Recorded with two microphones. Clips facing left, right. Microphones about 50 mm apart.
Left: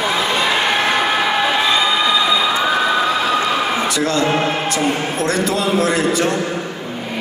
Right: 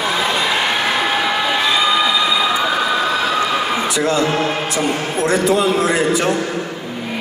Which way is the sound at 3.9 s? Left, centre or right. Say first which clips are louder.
Even; centre.